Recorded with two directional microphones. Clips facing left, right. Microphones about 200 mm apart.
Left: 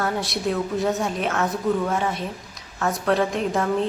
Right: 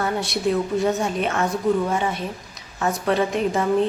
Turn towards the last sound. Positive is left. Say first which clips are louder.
# right 2 dB
turn(degrees=0)  # may be behind; listen again after turning